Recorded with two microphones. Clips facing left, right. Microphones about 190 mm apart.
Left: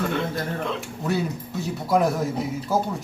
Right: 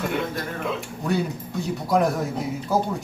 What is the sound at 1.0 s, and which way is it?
Speech, centre (ahead or behind).